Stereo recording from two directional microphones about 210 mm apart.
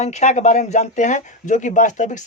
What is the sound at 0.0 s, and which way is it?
Speech, 35° left (ahead or behind).